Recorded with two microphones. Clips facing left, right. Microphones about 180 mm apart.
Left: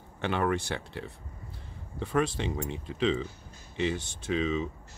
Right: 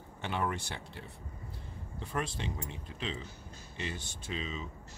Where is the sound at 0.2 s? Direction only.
80° left.